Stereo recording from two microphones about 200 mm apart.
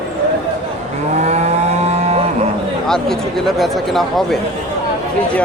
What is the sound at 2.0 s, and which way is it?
Cattle, 35° right (ahead or behind).